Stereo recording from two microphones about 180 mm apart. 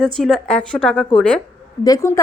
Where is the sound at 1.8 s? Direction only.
20° left (ahead or behind).